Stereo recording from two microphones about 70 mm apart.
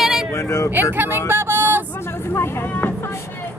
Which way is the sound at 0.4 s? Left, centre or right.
Left.